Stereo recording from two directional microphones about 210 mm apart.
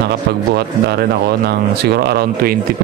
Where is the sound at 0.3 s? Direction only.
50° right (ahead or behind).